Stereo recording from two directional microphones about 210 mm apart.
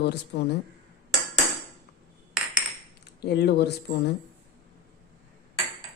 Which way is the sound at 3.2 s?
50° left (ahead or behind).